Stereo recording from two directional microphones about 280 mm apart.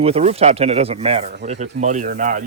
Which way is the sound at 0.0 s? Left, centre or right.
Right.